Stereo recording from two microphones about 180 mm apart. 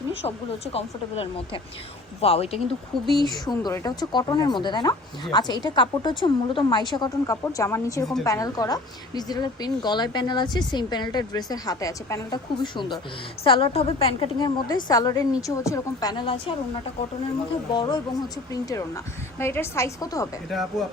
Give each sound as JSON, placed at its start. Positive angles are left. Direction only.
{"t": 0.2, "sound": "speech", "side_deg": 35}
{"t": 2.9, "sound": "speech", "side_deg": 0}
{"t": 3.2, "sound": "speech", "side_deg": 20}
{"t": 17.7, "sound": "a woman's voice", "side_deg": 25}
{"t": 20.5, "sound": "speech", "side_deg": 0}